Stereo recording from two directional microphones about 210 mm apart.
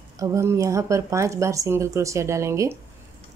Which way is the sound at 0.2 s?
15° right (ahead or behind).